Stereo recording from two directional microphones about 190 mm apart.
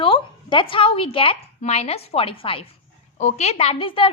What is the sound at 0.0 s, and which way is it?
A woman's voice, 25° left (ahead or behind).